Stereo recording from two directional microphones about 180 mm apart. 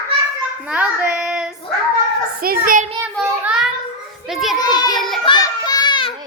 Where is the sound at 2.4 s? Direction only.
50° right (ahead or behind).